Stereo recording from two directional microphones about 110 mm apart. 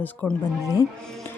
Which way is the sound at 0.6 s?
30° left (ahead or behind).